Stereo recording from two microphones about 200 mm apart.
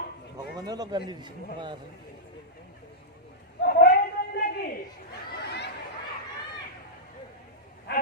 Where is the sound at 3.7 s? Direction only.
45° left (ahead or behind).